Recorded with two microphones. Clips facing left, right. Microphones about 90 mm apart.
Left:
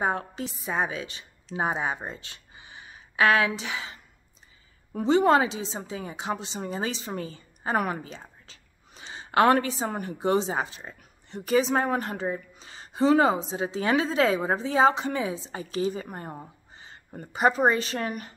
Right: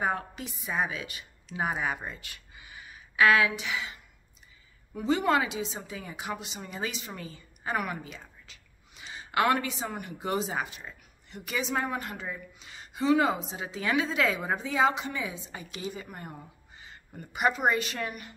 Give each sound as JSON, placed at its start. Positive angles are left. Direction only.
{"t": 0.0, "sound": "a woman's voice", "side_deg": 30}
{"t": 5.0, "sound": "a woman's voice", "side_deg": 30}